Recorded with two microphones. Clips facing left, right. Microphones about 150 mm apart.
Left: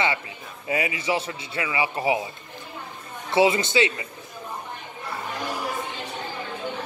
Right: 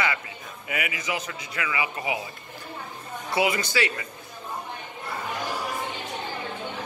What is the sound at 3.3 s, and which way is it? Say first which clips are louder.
Speech: left 5 dB; 25° left (ahead or behind).